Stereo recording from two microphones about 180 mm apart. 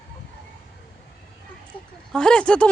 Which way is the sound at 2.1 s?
5° left (ahead or behind).